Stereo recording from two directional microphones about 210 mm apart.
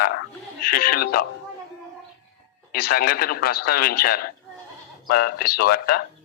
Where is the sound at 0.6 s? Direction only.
45° left (ahead or behind).